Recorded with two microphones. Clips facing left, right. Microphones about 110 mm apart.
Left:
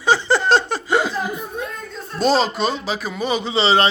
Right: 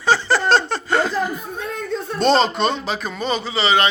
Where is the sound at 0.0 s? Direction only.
15° left (ahead or behind).